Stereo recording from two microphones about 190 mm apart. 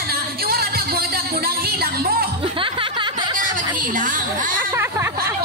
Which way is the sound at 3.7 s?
45° right (ahead or behind).